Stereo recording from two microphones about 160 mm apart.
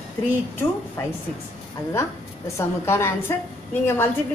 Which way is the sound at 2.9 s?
15° left (ahead or behind).